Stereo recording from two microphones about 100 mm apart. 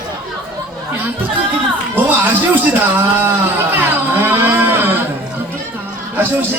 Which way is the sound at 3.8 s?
20° right (ahead or behind).